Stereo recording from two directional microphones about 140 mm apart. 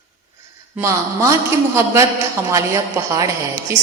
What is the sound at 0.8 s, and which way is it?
A woman's voice, 20° right (ahead or behind).